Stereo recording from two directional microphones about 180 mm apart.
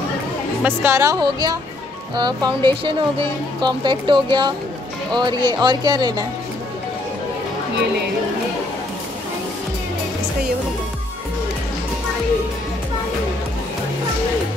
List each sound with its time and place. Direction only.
0.6 s speech: 10° right (ahead or behind)